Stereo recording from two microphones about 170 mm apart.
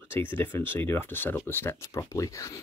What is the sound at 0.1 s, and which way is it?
Speech, 10° left (ahead or behind).